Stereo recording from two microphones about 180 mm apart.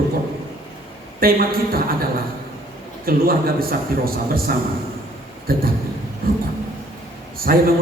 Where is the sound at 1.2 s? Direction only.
55° right (ahead or behind).